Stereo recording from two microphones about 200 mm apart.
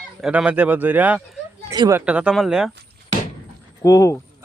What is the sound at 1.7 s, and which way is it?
Speech, 20° right (ahead or behind).